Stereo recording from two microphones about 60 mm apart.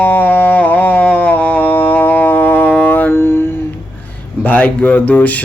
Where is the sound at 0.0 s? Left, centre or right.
Left.